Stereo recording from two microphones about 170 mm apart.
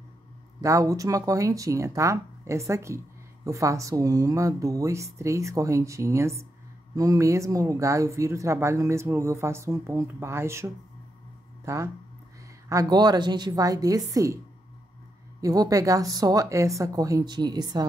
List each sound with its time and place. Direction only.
0.6 s speech: 20° right (ahead or behind)
15.4 s speech: 20° right (ahead or behind)